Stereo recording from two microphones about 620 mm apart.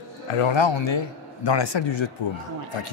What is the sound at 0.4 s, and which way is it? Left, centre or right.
Speech, left.